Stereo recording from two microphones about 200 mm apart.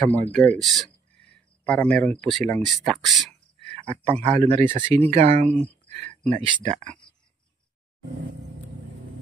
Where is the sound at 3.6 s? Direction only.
30° right (ahead or behind).